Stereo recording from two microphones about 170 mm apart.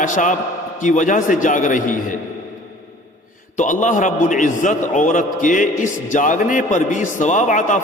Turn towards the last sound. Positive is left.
turn(degrees=50)  # may be behind; listen again after turning